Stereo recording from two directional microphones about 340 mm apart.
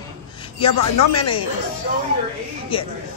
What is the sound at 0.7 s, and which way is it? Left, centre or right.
Speech, left.